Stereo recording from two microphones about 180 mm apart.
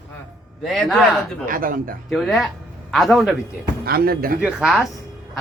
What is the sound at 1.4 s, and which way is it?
Speech, 50° right (ahead or behind).